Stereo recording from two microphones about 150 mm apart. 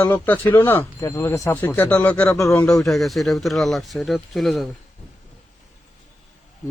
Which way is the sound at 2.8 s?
Centre (ahead or behind).